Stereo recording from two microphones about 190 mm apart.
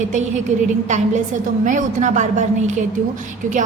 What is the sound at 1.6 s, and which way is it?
A woman's voice, 40° right (ahead or behind).